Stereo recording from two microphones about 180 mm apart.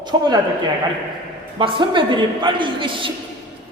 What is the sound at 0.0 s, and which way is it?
Speech, 25° right (ahead or behind).